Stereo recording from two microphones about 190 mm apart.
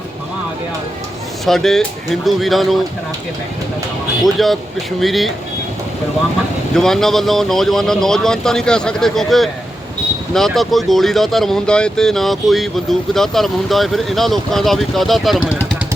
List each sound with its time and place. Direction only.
1.5 s speech: centre (ahead or behind)
4.2 s speech: centre (ahead or behind)
6.7 s speech: centre (ahead or behind)